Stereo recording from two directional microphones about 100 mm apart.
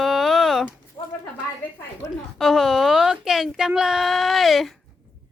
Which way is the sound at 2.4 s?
Centre (ahead or behind).